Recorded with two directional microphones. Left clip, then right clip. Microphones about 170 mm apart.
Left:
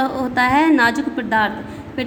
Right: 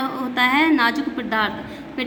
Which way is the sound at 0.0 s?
35° left (ahead or behind).